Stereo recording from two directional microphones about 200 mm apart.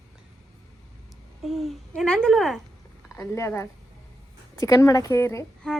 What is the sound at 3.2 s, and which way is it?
A woman's voice, 15° left (ahead or behind).